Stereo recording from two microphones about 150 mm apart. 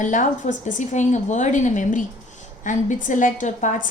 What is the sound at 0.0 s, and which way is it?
A woman's voice, 55° left (ahead or behind).